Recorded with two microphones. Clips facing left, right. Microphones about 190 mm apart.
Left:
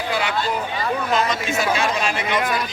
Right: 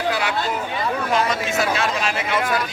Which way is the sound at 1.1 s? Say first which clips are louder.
Right 1 dB; 5° right (ahead or behind).